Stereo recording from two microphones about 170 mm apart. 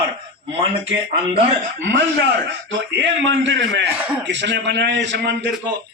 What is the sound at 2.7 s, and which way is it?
A man's voice, 90° right.